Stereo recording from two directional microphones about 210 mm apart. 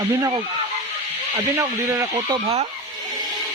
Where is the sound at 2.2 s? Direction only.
25° right (ahead or behind).